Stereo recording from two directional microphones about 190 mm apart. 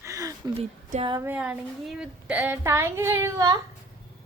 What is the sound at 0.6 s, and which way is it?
Speech, 30° right (ahead or behind).